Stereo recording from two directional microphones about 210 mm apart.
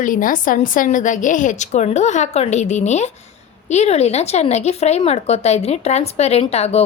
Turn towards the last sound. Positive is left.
turn(degrees=30)  # may be behind; listen again after turning